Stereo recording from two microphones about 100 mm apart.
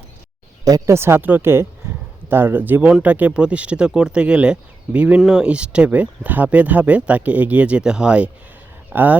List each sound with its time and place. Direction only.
0.6 s speech: 35° right (ahead or behind)
0.9 s speech: 25° right (ahead or behind)